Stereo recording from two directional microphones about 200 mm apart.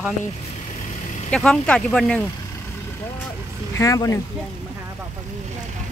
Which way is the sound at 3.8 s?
15° left (ahead or behind).